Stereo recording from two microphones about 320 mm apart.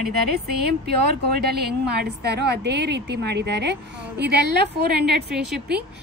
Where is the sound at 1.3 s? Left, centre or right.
Right.